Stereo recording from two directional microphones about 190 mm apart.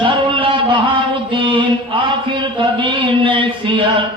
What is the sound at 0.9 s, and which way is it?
Music, 25° right (ahead or behind).